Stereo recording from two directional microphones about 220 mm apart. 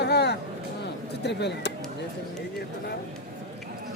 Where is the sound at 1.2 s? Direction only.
50° left (ahead or behind).